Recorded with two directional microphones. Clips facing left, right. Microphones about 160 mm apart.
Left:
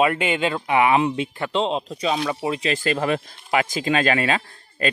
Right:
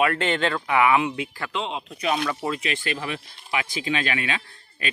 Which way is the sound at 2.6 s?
40° left (ahead or behind).